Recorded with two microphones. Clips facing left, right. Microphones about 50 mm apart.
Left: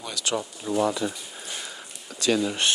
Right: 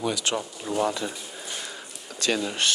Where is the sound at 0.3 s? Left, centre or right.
Right.